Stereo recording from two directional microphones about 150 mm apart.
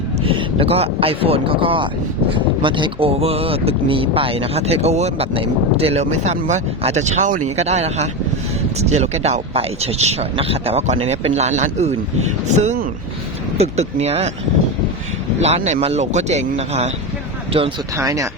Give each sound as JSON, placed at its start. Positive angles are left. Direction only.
{"t": 0.3, "sound": "speech", "side_deg": -40}
{"t": 15.4, "sound": "speech", "side_deg": -45}
{"t": 17.9, "sound": "speech", "side_deg": -20}